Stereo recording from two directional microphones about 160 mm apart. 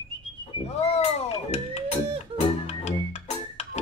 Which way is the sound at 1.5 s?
45° left (ahead or behind).